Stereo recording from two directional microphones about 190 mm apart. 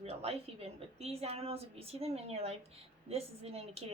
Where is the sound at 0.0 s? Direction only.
35° right (ahead or behind).